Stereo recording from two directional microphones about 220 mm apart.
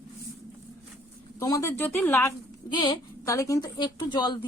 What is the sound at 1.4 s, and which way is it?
Speech, 15° left (ahead or behind).